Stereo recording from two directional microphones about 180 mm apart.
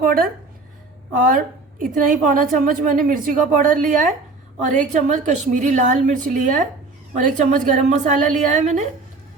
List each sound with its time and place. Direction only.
0.0 s a woman's voice: 55° right (ahead or behind)